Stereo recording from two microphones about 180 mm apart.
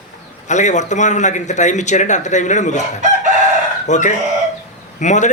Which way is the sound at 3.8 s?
40° left (ahead or behind).